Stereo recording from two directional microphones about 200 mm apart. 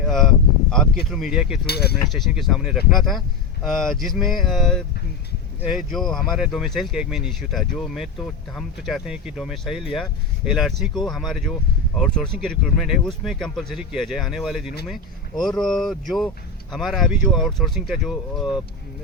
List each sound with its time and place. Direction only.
0.7 s speech: centre (ahead or behind)
1.6 s speech: 50° left (ahead or behind)
2.1 s speech: centre (ahead or behind)